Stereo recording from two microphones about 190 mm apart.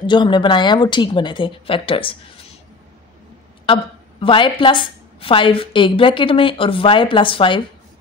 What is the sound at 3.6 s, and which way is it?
A woman's voice, 30° left (ahead or behind).